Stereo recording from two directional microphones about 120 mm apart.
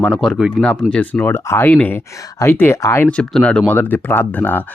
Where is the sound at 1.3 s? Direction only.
20° left (ahead or behind).